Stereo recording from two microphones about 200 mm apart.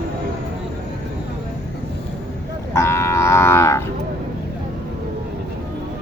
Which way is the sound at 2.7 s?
15° left (ahead or behind).